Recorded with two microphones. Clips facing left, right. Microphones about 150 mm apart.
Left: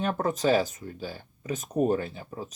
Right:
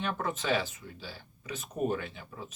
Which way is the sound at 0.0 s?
40° left (ahead or behind).